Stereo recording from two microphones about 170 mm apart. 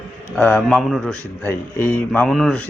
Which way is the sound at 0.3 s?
10° left (ahead or behind).